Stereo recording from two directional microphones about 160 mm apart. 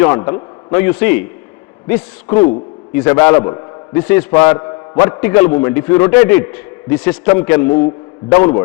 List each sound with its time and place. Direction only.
0.0 s a man's voice: 20° left (ahead or behind)
0.7 s a man's voice: 10° left (ahead or behind)
4.5 s mantra: 20° left (ahead or behind)
5.2 s a man's voice: 10° left (ahead or behind)
5.5 s a man's voice: 25° left (ahead or behind)